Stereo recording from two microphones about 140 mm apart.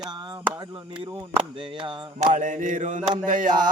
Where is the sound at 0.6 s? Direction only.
30° right (ahead or behind).